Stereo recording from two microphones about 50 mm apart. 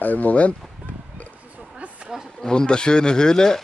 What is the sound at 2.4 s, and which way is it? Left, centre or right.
Speech, centre.